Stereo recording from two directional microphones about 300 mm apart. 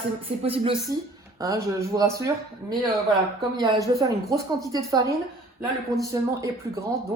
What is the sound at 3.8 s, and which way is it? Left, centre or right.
Speech, centre.